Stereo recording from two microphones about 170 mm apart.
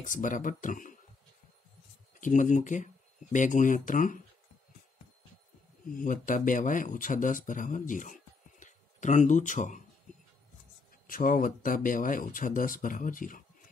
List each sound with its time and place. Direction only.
0.0 s speech: 50° left (ahead or behind)
2.1 s speech: 50° left (ahead or behind)
5.9 s speech: 50° left (ahead or behind)
11.1 s speech: 55° left (ahead or behind)